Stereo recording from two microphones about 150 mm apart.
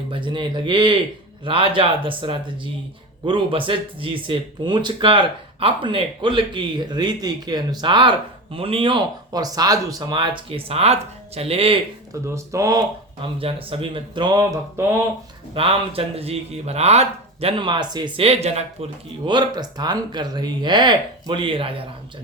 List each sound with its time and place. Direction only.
0.1 s speech: 35° right (ahead or behind)
12.2 s speech: 20° right (ahead or behind)
13.4 s speech: 40° right (ahead or behind); by 15.0 s 20° right (ahead or behind)
15.5 s speech: 40° right (ahead or behind)
17.6 s speech: 30° right (ahead or behind); by 18.9 s 45° right (ahead or behind)
19.2 s speech: 30° right (ahead or behind)